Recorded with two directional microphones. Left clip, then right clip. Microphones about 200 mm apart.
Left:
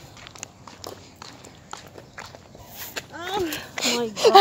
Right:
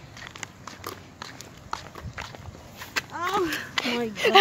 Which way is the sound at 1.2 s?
40° right (ahead or behind).